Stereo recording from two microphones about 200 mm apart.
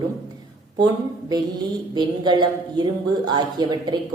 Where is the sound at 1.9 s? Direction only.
20° right (ahead or behind).